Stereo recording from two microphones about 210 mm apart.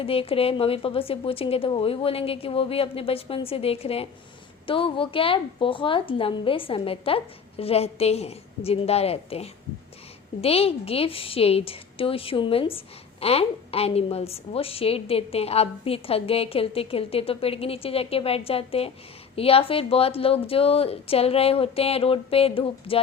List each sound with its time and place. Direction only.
0.0 s a woman's voice: 25° left (ahead or behind)